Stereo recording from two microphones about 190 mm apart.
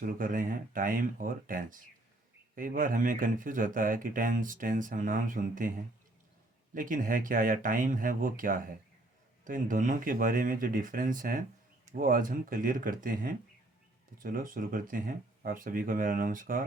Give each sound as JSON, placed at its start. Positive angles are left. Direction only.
{"t": 0.0, "sound": "speech", "side_deg": -45}
{"t": 6.7, "sound": "speech", "side_deg": -45}